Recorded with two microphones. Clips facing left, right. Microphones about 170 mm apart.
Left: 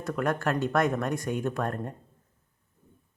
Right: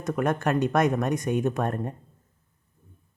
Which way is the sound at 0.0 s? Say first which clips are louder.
Right 3 dB; 20° right (ahead or behind).